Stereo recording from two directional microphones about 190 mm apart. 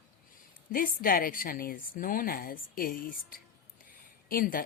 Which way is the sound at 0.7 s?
50° left (ahead or behind).